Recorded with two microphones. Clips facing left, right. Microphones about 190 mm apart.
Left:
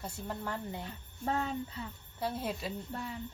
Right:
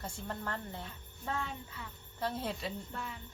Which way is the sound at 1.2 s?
35° left (ahead or behind).